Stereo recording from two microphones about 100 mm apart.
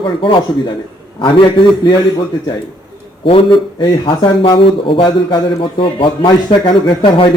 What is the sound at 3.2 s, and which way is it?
A man's voice, 65° left (ahead or behind).